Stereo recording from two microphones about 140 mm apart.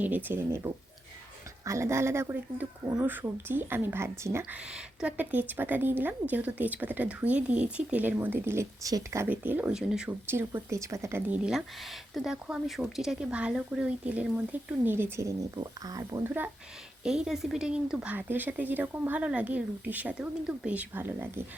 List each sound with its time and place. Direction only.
0.0 s a woman's voice: 15° right (ahead or behind)
4.7 s a woman's voice: 5° right (ahead or behind)
10.2 s speech: 15° right (ahead or behind)
11.3 s speech: 5° right (ahead or behind); by 16.2 s 25° right (ahead or behind)
17.0 s a woman's voice: 5° right (ahead or behind)